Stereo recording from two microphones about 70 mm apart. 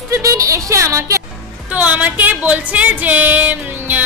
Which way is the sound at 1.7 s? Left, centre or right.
Right.